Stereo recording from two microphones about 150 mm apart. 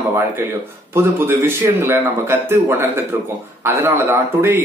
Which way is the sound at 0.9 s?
15° right (ahead or behind).